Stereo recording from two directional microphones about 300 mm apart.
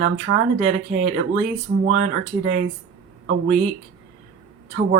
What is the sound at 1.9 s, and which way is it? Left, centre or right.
Speech, right.